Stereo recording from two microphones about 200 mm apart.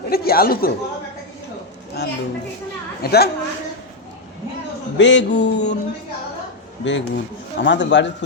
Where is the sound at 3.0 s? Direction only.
50° left (ahead or behind).